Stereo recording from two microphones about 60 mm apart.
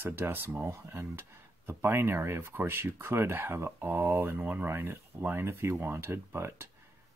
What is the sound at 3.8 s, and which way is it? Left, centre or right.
Speech, right.